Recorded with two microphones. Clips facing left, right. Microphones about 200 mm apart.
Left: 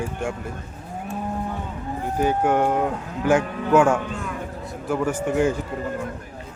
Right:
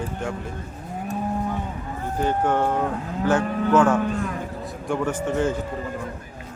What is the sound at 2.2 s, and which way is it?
Speech, 10° left (ahead or behind).